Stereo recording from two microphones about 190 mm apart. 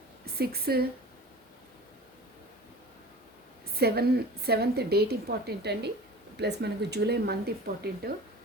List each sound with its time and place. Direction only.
0.3 s a woman's voice: 55° right (ahead or behind)
3.8 s a woman's voice: 55° right (ahead or behind)